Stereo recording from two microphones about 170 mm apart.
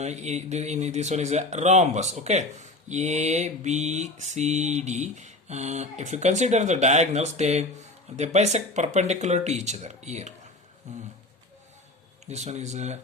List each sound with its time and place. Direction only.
0.0 s speech: 40° right (ahead or behind)
12.2 s speech: 40° right (ahead or behind)